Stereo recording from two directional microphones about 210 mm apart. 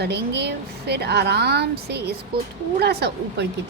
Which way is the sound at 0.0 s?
50° right (ahead or behind).